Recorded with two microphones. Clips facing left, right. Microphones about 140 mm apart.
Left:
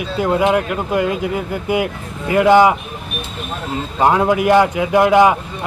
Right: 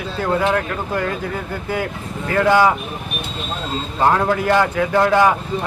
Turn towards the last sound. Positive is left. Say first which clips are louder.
# left 3 dB
turn(degrees=15)  # may be behind; listen again after turning